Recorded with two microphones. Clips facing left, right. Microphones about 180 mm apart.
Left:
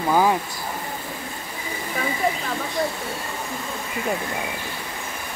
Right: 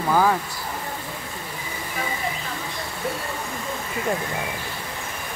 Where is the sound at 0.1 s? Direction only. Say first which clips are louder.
Left 1 dB; 15° left (ahead or behind).